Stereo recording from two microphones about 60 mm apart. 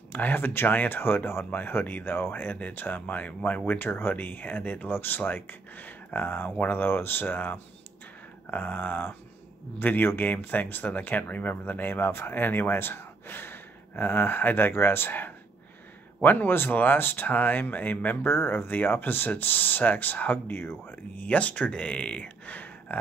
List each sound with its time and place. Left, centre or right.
0.1 s speech: left
8.5 s a sound: left
9.8 s speech: left
21.2 s speech: left